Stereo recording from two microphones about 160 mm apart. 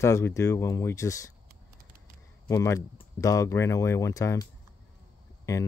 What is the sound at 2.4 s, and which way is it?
Speech, 20° left (ahead or behind).